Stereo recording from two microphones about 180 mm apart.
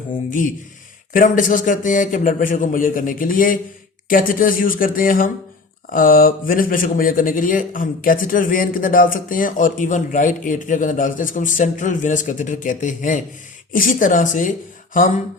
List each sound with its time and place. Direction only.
0.3 s speech: 45° left (ahead or behind)